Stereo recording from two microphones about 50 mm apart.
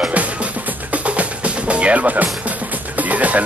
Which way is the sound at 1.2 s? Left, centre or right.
Right.